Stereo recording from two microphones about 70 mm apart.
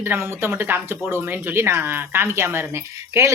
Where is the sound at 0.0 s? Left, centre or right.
Right.